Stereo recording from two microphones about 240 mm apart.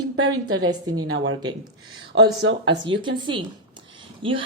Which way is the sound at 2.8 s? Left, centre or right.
Centre.